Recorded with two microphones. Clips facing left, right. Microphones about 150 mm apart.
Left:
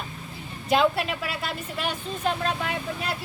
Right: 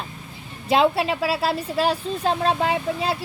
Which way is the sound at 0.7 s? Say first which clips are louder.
Right 3 dB; 30° right (ahead or behind).